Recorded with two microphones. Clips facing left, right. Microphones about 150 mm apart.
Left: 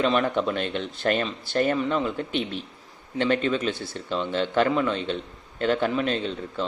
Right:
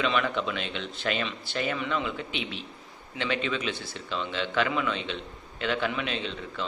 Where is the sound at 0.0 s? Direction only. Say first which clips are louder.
Left 5 dB; 40° left (ahead or behind).